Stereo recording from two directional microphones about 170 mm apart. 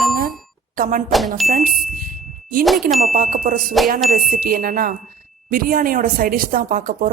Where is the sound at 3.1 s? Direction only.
55° right (ahead or behind).